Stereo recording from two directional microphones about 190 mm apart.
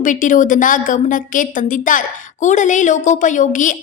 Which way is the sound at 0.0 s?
40° left (ahead or behind).